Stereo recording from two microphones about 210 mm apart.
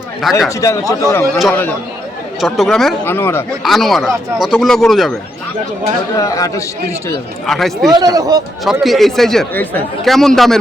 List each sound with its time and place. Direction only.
0.2 s speech: centre (ahead or behind)
0.6 s a man's voice: 15° left (ahead or behind)
1.4 s speech: 5° left (ahead or behind)
3.6 s speech: centre (ahead or behind)
6.1 s a man's voice: 15° left (ahead or behind)
7.4 s speech: centre (ahead or behind)
7.9 s speech: 15° right (ahead or behind)
8.6 s speech: centre (ahead or behind)